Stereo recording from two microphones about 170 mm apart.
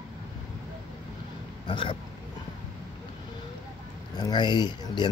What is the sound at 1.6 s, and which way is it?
Speech, 30° left (ahead or behind).